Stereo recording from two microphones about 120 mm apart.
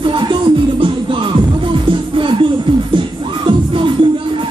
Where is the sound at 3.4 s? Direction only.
45° right (ahead or behind).